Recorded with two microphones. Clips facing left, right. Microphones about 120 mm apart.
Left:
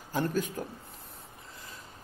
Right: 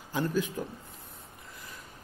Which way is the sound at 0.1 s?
45° left (ahead or behind).